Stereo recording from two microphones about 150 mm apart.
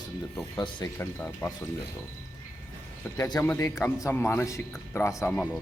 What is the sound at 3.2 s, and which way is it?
Speech, 25° left (ahead or behind).